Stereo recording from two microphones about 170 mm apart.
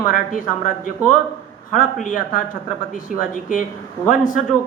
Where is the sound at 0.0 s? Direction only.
55° left (ahead or behind).